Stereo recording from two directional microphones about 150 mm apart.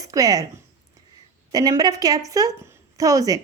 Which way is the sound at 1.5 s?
25° right (ahead or behind).